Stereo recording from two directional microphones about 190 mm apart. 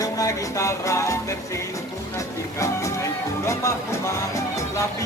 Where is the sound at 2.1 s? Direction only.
15° left (ahead or behind).